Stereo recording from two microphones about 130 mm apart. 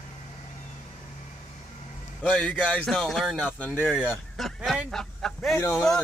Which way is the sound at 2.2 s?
10° left (ahead or behind).